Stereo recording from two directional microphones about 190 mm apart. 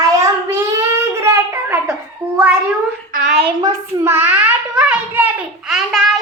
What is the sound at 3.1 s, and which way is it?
Speech, 35° right (ahead or behind).